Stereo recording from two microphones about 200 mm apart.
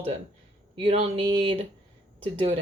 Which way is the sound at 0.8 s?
30° right (ahead or behind).